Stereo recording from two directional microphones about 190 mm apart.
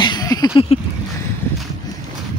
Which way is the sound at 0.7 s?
30° left (ahead or behind).